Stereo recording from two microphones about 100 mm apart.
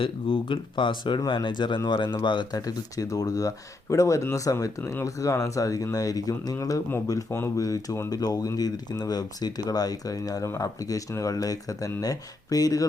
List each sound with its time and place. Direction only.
0.0 s speech: 60° left (ahead or behind)
2.6 s speech: 35° left (ahead or behind)
4.8 s speech: 20° left (ahead or behind)
5.0 s speech: 35° left (ahead or behind)